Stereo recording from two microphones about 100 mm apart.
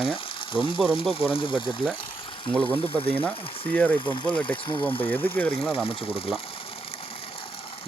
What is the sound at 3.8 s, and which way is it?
Speech, 55° left (ahead or behind).